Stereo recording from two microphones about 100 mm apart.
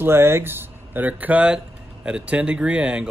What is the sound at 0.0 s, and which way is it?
Speech, 25° right (ahead or behind).